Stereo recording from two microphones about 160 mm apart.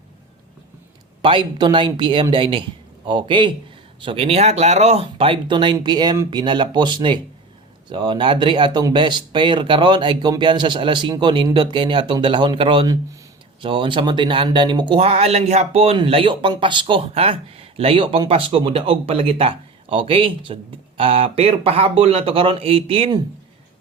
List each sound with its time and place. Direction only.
1.2 s speech: 30° right (ahead or behind)